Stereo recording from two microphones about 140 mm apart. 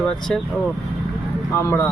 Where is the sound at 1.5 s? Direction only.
20° left (ahead or behind).